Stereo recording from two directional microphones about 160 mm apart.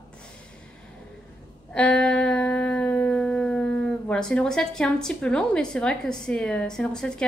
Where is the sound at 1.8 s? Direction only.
5° left (ahead or behind).